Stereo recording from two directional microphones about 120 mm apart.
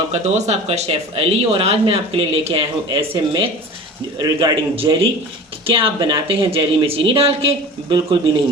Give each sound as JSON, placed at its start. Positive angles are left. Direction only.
{"t": 0.1, "sound": "speech", "side_deg": -70}
{"t": 4.2, "sound": "a man's voice", "side_deg": -40}
{"t": 4.7, "sound": "speech", "side_deg": -50}